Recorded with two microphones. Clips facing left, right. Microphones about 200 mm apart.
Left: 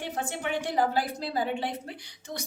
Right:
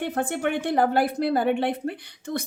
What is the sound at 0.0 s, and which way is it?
A woman's voice, 55° right (ahead or behind).